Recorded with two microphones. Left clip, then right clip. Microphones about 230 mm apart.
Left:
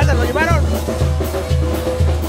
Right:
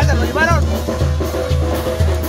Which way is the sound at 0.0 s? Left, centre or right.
Centre.